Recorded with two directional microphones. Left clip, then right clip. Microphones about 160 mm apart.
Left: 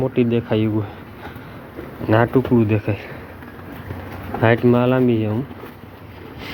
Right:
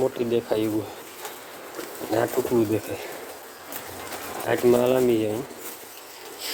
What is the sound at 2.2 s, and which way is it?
Speech, 15° right (ahead or behind).